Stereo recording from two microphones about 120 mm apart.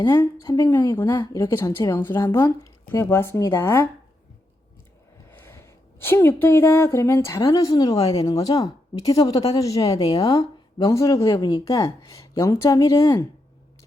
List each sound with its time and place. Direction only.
0.0 s speech: 30° left (ahead or behind)
0.7 s speech: 15° left (ahead or behind)
5.3 s speech: 20° left (ahead or behind)